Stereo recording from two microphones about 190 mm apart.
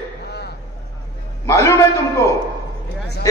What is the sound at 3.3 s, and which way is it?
Speech, 15° left (ahead or behind).